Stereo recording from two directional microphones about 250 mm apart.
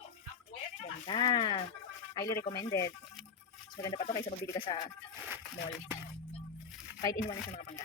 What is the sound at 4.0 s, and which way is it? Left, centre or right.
Speech, left.